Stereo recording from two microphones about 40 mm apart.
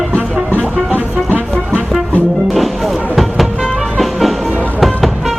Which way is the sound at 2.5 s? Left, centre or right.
Centre.